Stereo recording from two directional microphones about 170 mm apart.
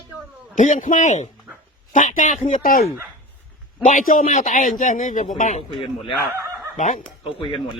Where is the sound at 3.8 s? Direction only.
50° left (ahead or behind).